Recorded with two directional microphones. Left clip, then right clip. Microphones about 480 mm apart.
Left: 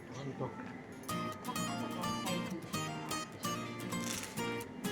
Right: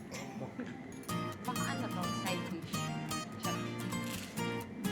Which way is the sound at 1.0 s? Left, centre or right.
Centre.